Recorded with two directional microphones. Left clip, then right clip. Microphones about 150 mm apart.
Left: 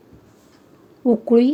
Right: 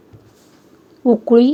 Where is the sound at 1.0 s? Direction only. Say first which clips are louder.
Right 4 dB; 15° right (ahead or behind).